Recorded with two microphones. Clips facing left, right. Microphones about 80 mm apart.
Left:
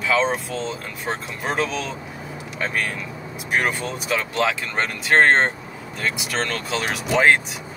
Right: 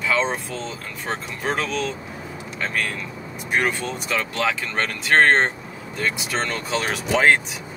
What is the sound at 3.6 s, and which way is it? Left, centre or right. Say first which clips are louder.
Speech: right 1 dB; centre.